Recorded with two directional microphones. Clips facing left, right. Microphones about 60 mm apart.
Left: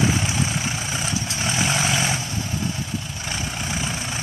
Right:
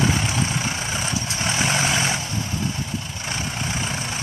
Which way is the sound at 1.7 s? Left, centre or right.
Right.